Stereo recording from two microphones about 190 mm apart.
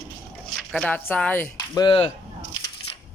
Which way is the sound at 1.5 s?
20° left (ahead or behind).